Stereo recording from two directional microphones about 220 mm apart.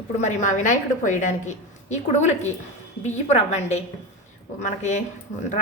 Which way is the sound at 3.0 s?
30° left (ahead or behind).